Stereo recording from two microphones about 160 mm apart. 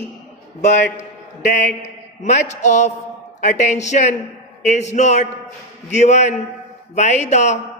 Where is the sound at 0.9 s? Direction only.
50° left (ahead or behind).